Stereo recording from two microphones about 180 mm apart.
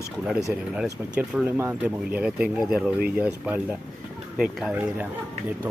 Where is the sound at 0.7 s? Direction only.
5° right (ahead or behind).